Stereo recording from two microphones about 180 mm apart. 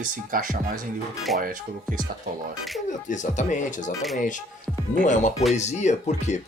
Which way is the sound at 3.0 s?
45° left (ahead or behind).